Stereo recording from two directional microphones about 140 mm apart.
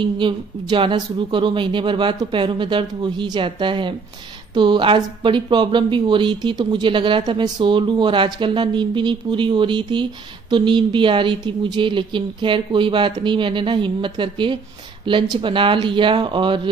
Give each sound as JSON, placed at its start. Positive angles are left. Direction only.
{"t": 0.0, "sound": "speech", "side_deg": -35}